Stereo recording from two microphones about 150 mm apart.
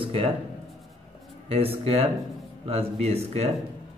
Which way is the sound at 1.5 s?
40° right (ahead or behind).